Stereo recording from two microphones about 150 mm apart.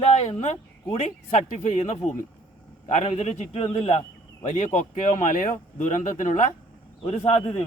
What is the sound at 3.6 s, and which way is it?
Speech, 40° left (ahead or behind).